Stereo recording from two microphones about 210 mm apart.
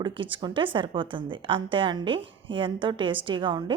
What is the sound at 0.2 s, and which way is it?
A woman's voice, 25° right (ahead or behind).